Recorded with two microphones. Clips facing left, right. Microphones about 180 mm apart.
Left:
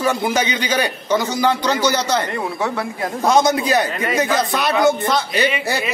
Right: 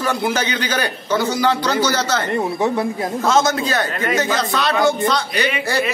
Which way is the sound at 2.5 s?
20° right (ahead or behind).